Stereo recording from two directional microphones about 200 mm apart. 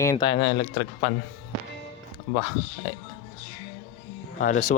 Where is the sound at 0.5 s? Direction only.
55° left (ahead or behind).